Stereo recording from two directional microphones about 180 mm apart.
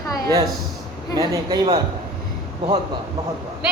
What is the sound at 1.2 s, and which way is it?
Speech, 20° right (ahead or behind).